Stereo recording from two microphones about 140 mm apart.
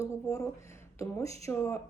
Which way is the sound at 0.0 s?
20° left (ahead or behind).